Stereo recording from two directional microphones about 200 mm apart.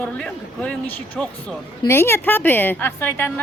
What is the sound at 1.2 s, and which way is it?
Speech, 5° left (ahead or behind).